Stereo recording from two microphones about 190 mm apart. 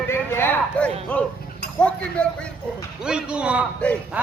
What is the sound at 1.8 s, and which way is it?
Speech, 5° left (ahead or behind).